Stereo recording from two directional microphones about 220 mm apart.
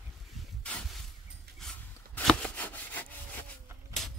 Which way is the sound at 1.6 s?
Centre (ahead or behind).